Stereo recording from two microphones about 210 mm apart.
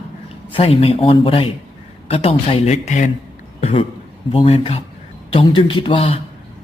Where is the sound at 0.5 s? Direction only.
25° left (ahead or behind).